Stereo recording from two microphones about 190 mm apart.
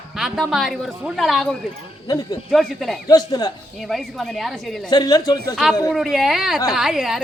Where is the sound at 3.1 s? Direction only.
20° left (ahead or behind).